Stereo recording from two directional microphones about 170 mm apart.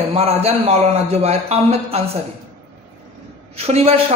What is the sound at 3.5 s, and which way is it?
Speech, 35° right (ahead or behind).